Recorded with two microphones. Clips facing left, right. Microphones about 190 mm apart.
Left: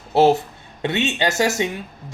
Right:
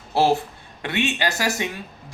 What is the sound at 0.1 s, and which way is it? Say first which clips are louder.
Speech: left 4 dB; 20° left (ahead or behind).